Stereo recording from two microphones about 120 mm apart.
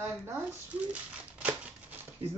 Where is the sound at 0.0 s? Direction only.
20° right (ahead or behind).